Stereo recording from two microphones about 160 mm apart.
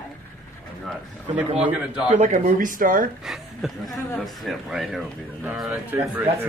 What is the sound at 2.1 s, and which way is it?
Speech, 50° right (ahead or behind).